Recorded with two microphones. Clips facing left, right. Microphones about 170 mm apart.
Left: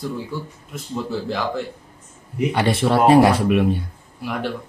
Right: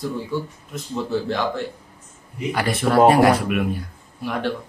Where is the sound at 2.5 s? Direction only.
25° left (ahead or behind).